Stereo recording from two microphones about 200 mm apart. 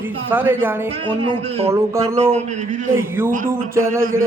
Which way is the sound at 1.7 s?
15° right (ahead or behind).